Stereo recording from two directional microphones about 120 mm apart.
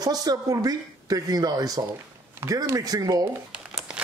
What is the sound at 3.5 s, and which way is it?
Crumpling, 10° right (ahead or behind).